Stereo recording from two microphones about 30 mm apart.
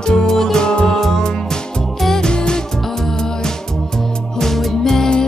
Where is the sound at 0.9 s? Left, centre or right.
Centre.